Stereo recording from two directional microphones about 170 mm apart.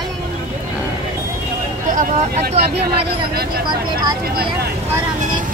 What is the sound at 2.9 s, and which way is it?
Speech, 65° right (ahead or behind).